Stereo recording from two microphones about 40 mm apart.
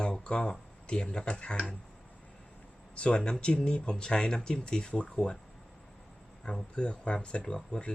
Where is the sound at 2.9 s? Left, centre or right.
Left.